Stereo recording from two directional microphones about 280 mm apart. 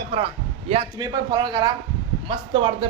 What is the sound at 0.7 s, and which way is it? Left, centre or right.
Speech, centre.